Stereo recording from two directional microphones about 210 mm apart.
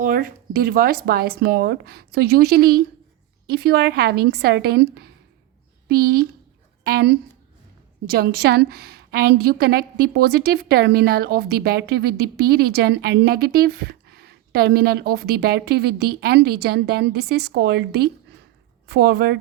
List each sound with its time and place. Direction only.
0.0 s a woman's voice: 40° right (ahead or behind)